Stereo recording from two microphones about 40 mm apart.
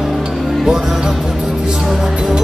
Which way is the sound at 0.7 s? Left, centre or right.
Centre.